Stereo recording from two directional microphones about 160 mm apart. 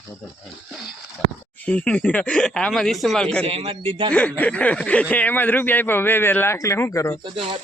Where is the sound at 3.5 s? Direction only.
40° right (ahead or behind).